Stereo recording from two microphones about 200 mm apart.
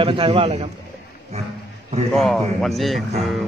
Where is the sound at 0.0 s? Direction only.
25° right (ahead or behind).